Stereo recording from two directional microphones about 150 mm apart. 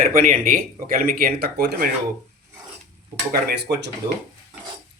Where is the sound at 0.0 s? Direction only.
65° right (ahead or behind); by 1.9 s 90° right.